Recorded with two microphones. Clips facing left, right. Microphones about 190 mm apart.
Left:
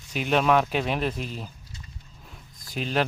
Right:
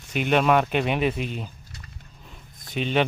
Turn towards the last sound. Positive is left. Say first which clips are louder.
# right 3 dB
turn(degrees=0)  # may be behind; listen again after turning